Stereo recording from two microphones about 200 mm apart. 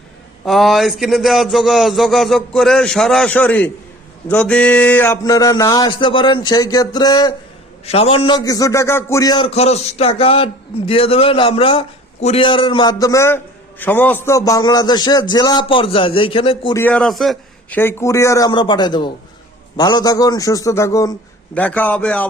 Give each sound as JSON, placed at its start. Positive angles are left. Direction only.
{"t": 0.4, "sound": "a sound", "side_deg": 0}
{"t": 4.3, "sound": "a man's voice", "side_deg": 5}
{"t": 16.7, "sound": "a man's voice", "side_deg": 10}